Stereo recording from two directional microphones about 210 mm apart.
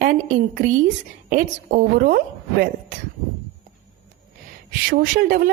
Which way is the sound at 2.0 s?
40° right (ahead or behind).